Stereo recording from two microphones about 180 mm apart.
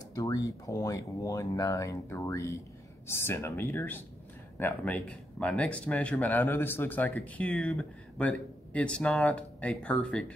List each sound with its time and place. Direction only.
0.1 s speech: 20° left (ahead or behind)